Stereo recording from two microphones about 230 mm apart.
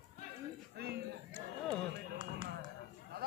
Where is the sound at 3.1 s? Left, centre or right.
Right.